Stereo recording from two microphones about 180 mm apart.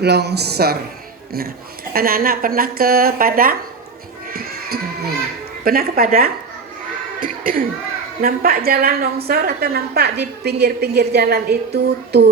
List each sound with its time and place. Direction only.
0.0 s a woman's voice: 65° right (ahead or behind)
4.3 s music: 55° right (ahead or behind)
5.6 s a woman's voice: 55° right (ahead or behind)